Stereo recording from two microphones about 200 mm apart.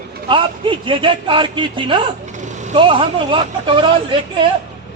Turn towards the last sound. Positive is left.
turn(degrees=-25)  # may be behind; listen again after turning